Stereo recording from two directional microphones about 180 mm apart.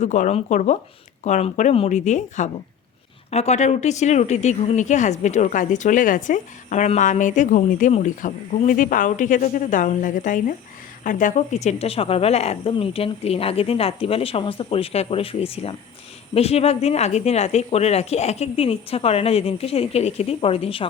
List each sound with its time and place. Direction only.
0.0 s a woman's voice: 40° left (ahead or behind)